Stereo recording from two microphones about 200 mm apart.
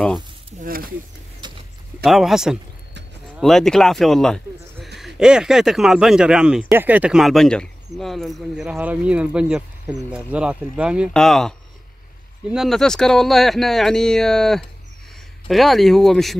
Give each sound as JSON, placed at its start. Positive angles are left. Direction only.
{"t": 0.7, "sound": "speech", "side_deg": -45}
{"t": 1.4, "sound": "mechanisms", "side_deg": -20}
{"t": 2.0, "sound": "speech", "side_deg": 0}